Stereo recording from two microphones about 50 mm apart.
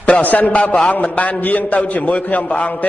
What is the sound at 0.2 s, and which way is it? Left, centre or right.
A man's voice, left.